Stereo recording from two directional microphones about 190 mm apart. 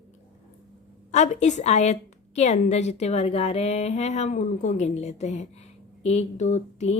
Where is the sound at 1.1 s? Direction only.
40° left (ahead or behind).